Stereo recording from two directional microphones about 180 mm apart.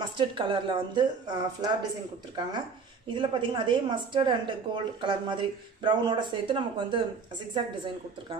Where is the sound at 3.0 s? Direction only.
25° right (ahead or behind).